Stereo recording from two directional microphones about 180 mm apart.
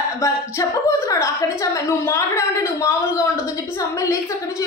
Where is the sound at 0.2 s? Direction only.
15° left (ahead or behind).